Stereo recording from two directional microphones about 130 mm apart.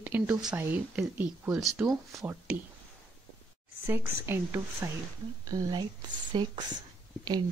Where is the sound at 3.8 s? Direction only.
20° right (ahead or behind).